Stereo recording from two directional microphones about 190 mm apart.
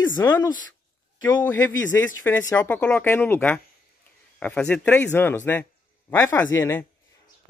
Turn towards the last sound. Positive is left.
turn(degrees=15)  # may be behind; listen again after turning